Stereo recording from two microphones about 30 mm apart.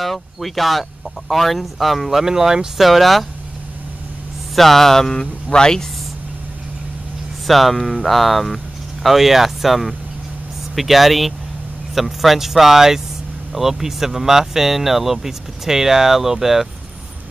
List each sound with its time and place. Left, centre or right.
0.0 s speech: centre
2.1 s speech: centre
2.8 s speech: centre
4.6 s mantra: centre
5.1 s speech: left
7.4 s speech: centre